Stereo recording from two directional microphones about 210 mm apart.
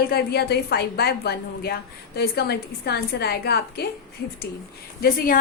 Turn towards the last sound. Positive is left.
turn(degrees=45)  # may be behind; listen again after turning